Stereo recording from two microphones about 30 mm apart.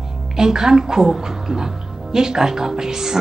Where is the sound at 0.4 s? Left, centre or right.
Centre.